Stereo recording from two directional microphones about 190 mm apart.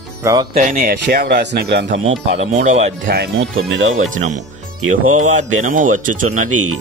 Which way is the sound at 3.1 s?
70° right (ahead or behind).